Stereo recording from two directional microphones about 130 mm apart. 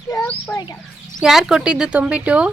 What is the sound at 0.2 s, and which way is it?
Speech, 10° left (ahead or behind).